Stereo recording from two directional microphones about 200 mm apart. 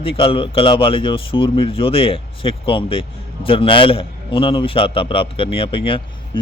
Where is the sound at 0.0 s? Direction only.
30° left (ahead or behind).